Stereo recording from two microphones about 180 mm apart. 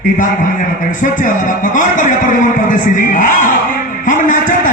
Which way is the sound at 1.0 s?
45° left (ahead or behind).